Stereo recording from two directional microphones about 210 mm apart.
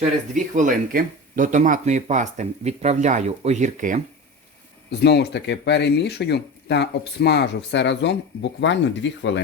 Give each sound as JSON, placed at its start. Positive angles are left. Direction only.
{"t": 0.3, "sound": "speech", "side_deg": -35}
{"t": 4.9, "sound": "speech", "side_deg": 50}